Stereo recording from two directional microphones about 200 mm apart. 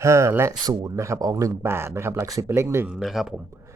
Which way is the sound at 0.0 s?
15° right (ahead or behind).